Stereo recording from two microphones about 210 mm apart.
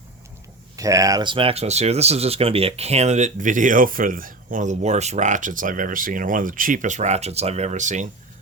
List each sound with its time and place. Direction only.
0.8 s speech: 15° right (ahead or behind); by 8.0 s 35° right (ahead or behind)